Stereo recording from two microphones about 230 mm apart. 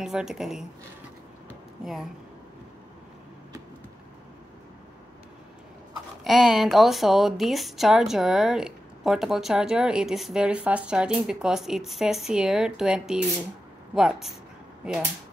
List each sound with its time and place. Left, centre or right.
0.0 s speech: centre
6.2 s speech: centre